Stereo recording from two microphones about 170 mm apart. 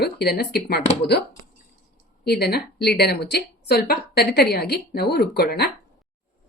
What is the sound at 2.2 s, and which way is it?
A woman's voice, 70° left (ahead or behind).